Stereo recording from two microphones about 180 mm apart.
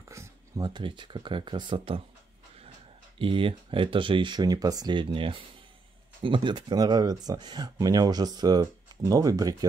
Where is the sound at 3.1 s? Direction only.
30° right (ahead or behind).